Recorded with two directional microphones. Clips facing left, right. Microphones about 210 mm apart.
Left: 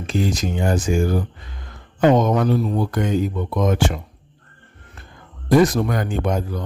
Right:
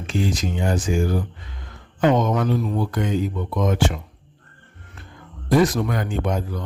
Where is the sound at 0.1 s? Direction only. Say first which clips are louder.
Left 2 dB; 40° left (ahead or behind).